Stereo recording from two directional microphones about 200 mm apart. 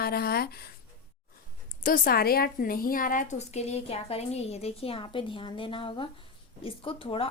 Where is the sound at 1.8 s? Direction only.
45° left (ahead or behind).